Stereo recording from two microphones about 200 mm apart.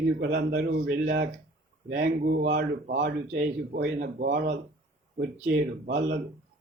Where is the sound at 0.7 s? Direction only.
60° right (ahead or behind).